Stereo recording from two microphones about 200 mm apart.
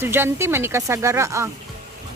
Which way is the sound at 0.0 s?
10° right (ahead or behind).